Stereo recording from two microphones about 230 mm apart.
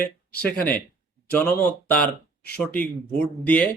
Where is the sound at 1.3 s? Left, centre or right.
Centre.